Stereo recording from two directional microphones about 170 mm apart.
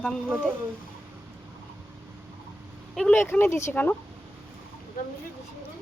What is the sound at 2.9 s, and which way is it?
Speech, 10° left (ahead or behind).